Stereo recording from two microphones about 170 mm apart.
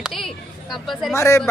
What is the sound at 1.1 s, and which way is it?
Speech, 15° left (ahead or behind).